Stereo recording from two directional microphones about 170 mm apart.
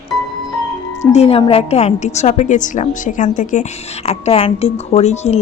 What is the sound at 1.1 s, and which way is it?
A woman's voice, 35° left (ahead or behind).